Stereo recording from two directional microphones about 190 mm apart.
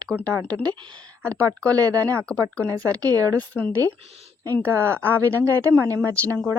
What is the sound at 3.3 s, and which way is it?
Speech, 10° left (ahead or behind).